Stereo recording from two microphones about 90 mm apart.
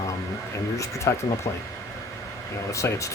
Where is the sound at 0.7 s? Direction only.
35° left (ahead or behind).